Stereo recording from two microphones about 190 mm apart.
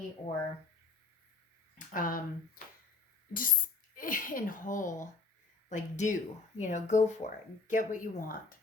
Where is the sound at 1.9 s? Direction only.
45° left (ahead or behind).